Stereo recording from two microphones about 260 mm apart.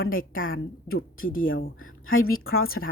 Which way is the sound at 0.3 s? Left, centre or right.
Left.